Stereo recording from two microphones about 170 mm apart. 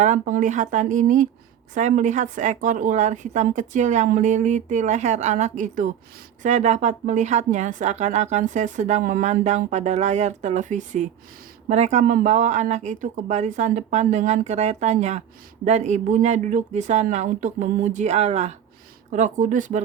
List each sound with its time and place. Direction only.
0.0 s a woman's voice: 45° right (ahead or behind)